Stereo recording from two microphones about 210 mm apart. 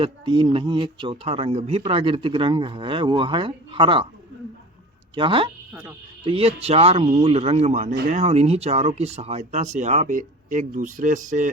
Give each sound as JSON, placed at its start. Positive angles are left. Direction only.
{"t": 0.0, "sound": "speech", "side_deg": -25}
{"t": 5.1, "sound": "speech", "side_deg": -25}